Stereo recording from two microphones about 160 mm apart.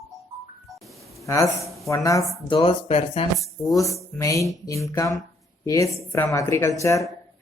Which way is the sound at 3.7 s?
20° left (ahead or behind).